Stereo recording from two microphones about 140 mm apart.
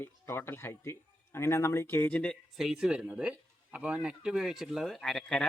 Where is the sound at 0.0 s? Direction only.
15° left (ahead or behind).